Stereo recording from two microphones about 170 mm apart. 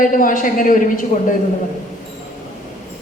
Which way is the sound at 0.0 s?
50° left (ahead or behind).